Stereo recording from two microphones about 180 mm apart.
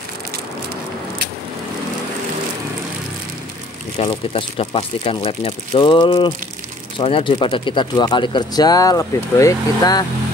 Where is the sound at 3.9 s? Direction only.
35° left (ahead or behind).